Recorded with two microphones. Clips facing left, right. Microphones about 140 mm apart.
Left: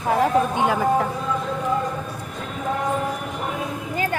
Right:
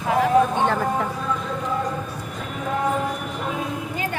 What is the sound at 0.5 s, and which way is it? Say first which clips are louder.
Vehicle: left 2 dB; 10° left (ahead or behind).